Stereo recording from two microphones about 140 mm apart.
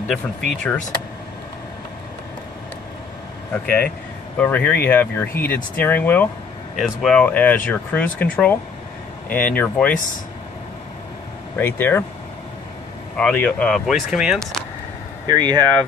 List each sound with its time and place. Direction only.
0.1 s speech: 5° left (ahead or behind)
3.5 s speech: 15° left (ahead or behind)
11.5 s speech: 15° left (ahead or behind)
13.1 s speech: 5° left (ahead or behind)
15.2 s speech: 30° right (ahead or behind)